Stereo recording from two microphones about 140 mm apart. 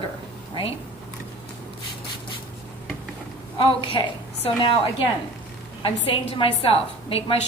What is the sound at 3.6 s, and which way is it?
A woman's voice, 40° left (ahead or behind).